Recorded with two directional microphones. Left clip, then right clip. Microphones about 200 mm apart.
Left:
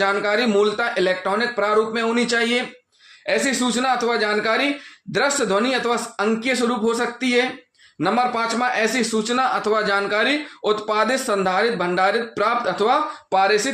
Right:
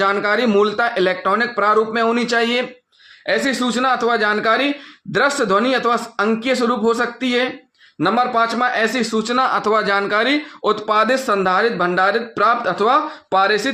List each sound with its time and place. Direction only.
0.0 s a man's voice: 30° right (ahead or behind)